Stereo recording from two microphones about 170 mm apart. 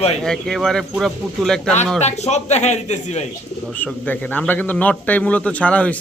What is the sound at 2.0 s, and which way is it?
Speech, 40° left (ahead or behind).